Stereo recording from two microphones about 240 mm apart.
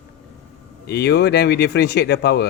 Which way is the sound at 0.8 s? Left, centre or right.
Left.